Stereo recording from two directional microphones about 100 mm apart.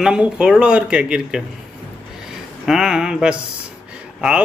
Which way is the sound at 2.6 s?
5° right (ahead or behind).